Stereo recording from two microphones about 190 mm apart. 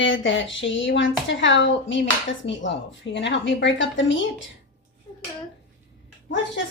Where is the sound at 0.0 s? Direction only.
80° left.